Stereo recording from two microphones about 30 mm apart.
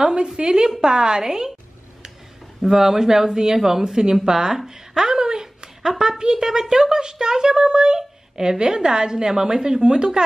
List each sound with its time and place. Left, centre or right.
0.0 s a sound: right
0.7 s a woman's voice: right
2.6 s a woman's voice: centre